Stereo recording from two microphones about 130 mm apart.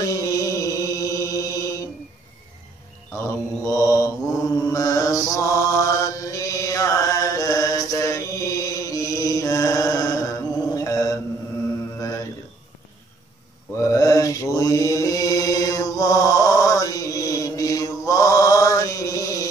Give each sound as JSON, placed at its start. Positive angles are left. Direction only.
{"t": 0.0, "sound": "mantra", "side_deg": 25}
{"t": 3.3, "sound": "mantra", "side_deg": 25}
{"t": 13.7, "sound": "mantra", "side_deg": 25}